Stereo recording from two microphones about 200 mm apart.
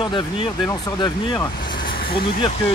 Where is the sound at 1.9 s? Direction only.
50° left (ahead or behind).